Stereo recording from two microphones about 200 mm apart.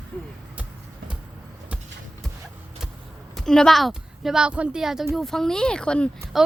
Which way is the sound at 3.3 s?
Centre (ahead or behind).